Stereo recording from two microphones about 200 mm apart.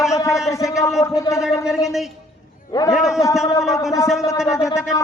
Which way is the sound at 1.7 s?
Centre (ahead or behind).